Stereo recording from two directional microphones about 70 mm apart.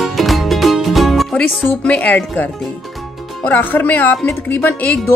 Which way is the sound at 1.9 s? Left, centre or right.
Left.